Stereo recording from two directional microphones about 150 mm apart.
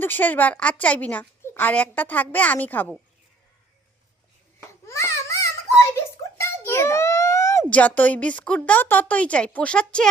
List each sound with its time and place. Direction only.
0.0 s a woman's voice: 10° left (ahead or behind)
4.9 s babbling: 20° left (ahead or behind)
6.3 s a sound: 15° left (ahead or behind)
7.7 s a woman's voice: 10° left (ahead or behind)